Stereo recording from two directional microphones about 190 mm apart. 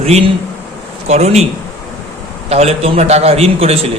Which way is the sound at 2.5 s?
35° right (ahead or behind).